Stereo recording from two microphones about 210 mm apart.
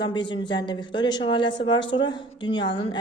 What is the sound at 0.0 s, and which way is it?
Speech, 20° left (ahead or behind).